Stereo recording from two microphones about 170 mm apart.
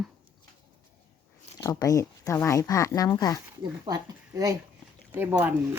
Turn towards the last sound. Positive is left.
turn(degrees=-10)  # may be behind; listen again after turning